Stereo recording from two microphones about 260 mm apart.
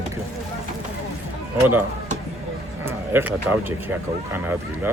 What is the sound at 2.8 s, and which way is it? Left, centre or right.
Speech, centre.